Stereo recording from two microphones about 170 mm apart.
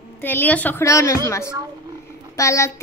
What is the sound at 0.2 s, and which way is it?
A woman's voice, 10° left (ahead or behind).